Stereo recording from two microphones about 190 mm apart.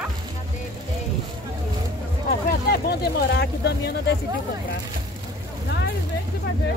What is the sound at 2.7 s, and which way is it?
Speech, 60° left (ahead or behind).